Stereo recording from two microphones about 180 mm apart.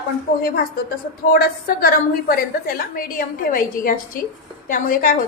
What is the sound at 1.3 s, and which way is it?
A woman's voice, 55° left (ahead or behind).